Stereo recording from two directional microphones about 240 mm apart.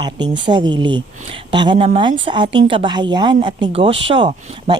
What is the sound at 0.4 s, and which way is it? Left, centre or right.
Speech, centre.